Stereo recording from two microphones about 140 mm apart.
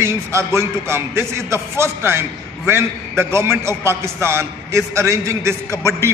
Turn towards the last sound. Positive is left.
turn(degrees=-20)  # may be behind; listen again after turning